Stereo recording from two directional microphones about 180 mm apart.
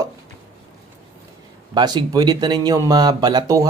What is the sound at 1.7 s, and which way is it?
Speech, 25° right (ahead or behind).